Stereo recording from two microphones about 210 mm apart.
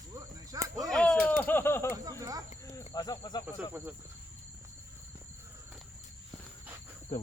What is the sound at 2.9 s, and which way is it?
Speech, 20° left (ahead or behind).